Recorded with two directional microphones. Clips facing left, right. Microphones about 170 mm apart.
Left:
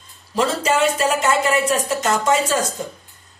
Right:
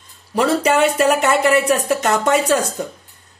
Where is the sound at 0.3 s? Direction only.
60° right (ahead or behind).